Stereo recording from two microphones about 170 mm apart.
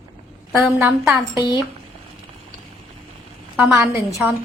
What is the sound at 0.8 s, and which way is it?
Speech, 10° right (ahead or behind).